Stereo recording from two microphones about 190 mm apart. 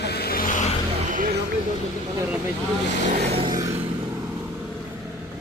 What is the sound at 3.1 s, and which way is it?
Vehicle, 40° right (ahead or behind).